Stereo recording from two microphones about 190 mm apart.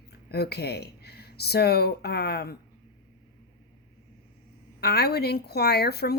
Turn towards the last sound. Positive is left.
turn(degrees=55)  # may be behind; listen again after turning